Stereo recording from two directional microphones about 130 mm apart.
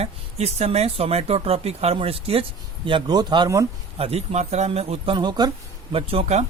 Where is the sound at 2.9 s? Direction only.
35° right (ahead or behind).